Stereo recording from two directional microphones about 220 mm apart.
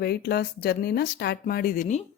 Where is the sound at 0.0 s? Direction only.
45° left (ahead or behind).